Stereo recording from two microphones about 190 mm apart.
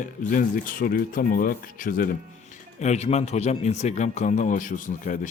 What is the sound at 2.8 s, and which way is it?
Speech, 35° left (ahead or behind).